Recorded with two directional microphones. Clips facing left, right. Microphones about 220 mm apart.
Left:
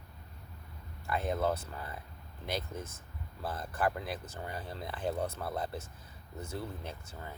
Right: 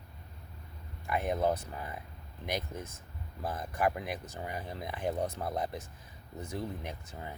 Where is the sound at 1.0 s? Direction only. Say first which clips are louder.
Right 2 dB; 15° right (ahead or behind).